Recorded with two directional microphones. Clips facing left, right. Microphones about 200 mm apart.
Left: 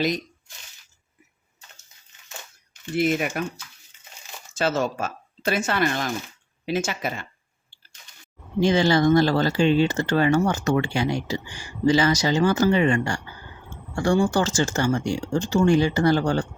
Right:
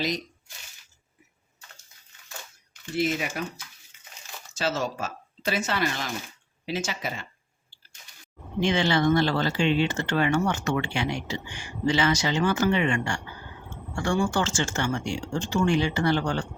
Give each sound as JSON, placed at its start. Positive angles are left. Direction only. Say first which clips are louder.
{"t": 2.9, "sound": "speech", "louder": "left 4 dB", "side_deg": 55}
{"t": 4.5, "sound": "speech", "louder": "left 5 dB", "side_deg": 55}
{"t": 8.6, "sound": "speech", "louder": "left 4 dB", "side_deg": 40}